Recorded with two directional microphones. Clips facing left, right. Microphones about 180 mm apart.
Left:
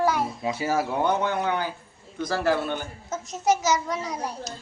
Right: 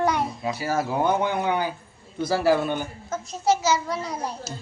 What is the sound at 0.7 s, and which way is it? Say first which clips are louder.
Speech: right 3 dB; 10° right (ahead or behind).